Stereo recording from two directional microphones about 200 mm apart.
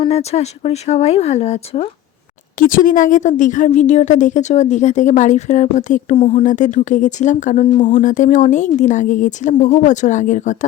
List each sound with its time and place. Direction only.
0.0 s a woman's voice: 30° left (ahead or behind)
2.6 s a woman's voice: 45° left (ahead or behind)